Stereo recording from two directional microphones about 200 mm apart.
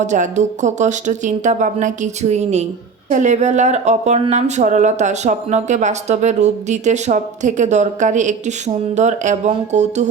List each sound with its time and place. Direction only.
0.0 s speech: 35° right (ahead or behind)